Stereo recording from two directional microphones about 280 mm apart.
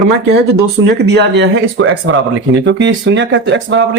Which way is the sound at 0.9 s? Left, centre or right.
Right.